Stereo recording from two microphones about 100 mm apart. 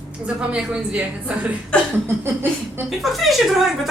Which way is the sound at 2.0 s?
25° right (ahead or behind).